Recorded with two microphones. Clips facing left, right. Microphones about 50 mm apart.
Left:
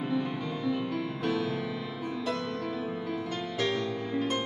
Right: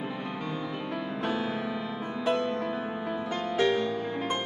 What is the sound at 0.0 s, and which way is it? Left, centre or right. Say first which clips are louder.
Music: left 3 dB; centre.